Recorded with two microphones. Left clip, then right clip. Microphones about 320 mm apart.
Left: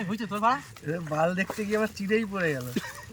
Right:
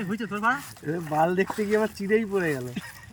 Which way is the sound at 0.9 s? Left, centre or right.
Centre.